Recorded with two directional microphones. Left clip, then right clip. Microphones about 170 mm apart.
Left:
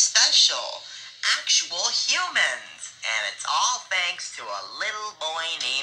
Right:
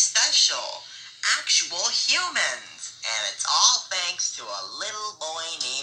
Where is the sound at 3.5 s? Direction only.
10° right (ahead or behind).